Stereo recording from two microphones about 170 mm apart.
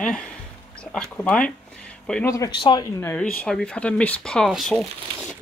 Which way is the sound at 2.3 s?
25° left (ahead or behind).